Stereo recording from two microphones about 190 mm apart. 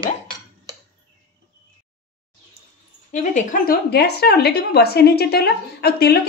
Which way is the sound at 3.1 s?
40° left (ahead or behind).